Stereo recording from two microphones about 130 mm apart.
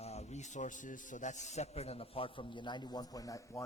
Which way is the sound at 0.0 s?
55° left (ahead or behind).